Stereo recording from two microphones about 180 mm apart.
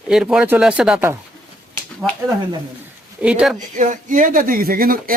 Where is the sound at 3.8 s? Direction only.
45° right (ahead or behind).